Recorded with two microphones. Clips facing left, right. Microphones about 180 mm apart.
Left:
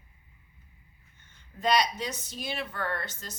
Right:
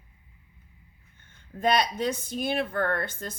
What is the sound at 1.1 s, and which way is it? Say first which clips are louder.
Speech: right 8 dB; 55° right (ahead or behind).